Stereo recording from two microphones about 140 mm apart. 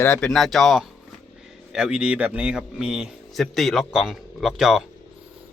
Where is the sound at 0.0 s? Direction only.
10° left (ahead or behind).